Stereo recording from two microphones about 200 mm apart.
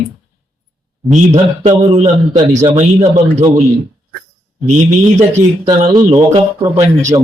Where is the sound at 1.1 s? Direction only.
35° right (ahead or behind).